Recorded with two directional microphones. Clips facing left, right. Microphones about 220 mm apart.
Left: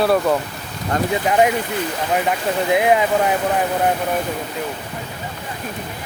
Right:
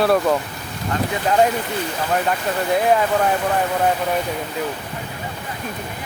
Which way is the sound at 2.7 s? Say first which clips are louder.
Left 1 dB; 15° left (ahead or behind).